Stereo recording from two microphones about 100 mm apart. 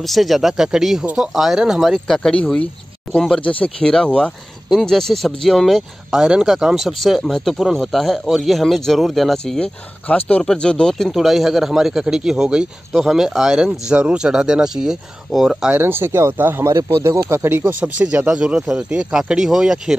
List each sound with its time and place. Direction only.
0.0 s speech: centre (ahead or behind)
10.0 s speech: 15° left (ahead or behind); by 15.8 s 5° right (ahead or behind)
15.8 s speech: 25° right (ahead or behind); by 20.0 s 5° right (ahead or behind)